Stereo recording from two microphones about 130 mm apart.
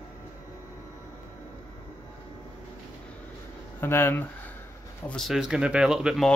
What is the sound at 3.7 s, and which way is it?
Speech, 15° left (ahead or behind).